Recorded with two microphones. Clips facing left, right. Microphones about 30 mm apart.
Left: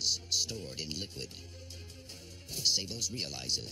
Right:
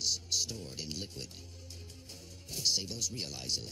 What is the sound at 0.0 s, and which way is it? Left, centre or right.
Speech, left.